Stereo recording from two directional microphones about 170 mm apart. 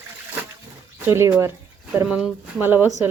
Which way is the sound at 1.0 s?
15° right (ahead or behind).